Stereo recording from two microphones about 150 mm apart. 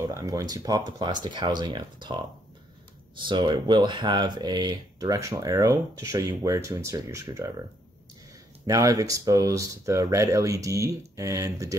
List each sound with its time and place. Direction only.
0.0 s speech: 25° right (ahead or behind)
3.3 s speech: 30° right (ahead or behind)
8.6 s speech: 20° right (ahead or behind)